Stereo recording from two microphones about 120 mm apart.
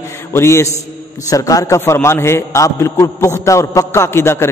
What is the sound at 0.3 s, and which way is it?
Mantra, 20° left (ahead or behind).